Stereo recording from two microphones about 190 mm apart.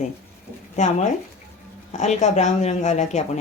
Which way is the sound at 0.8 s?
40° left (ahead or behind).